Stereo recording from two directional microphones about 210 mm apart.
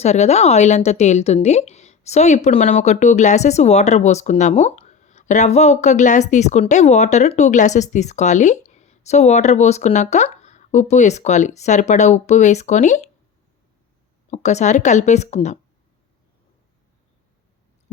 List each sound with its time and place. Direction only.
0.0 s a woman's voice: 30° left (ahead or behind)
14.3 s a woman's voice: 30° left (ahead or behind)